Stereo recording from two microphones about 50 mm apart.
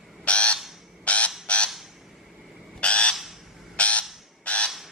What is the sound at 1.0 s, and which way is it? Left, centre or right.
Honk, left.